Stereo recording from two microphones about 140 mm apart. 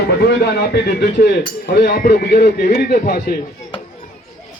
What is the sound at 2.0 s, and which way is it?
Speech, 90° left.